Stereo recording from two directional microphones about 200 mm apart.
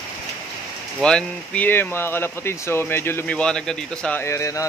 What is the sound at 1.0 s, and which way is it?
Speech, 5° left (ahead or behind).